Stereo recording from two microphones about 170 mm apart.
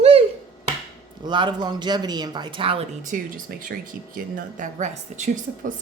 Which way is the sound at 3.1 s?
55° right (ahead or behind).